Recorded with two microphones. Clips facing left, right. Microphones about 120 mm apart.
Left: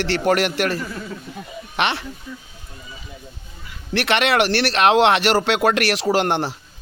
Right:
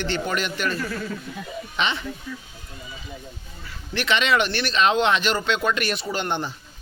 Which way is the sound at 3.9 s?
65° left (ahead or behind).